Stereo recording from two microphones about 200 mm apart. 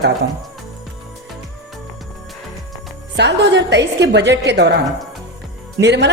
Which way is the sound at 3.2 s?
60° right (ahead or behind).